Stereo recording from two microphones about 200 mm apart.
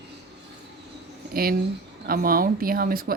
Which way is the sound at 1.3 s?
50° right (ahead or behind).